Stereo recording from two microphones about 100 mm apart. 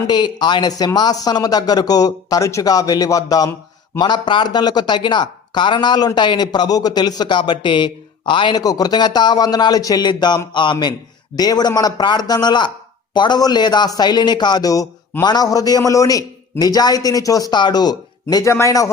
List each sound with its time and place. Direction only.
0.1 s a man's voice: 50° left (ahead or behind)
3.9 s a man's voice: 50° left (ahead or behind)
18.4 s a man's voice: 30° left (ahead or behind)